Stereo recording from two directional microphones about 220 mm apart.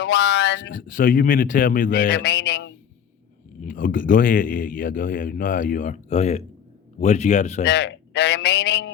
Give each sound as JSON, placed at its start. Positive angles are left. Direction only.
{"t": 0.0, "sound": "speech", "side_deg": 50}
{"t": 0.7, "sound": "a man's voice", "side_deg": 40}
{"t": 3.6, "sound": "a man's voice", "side_deg": 35}
{"t": 7.6, "sound": "a man's voice", "side_deg": 50}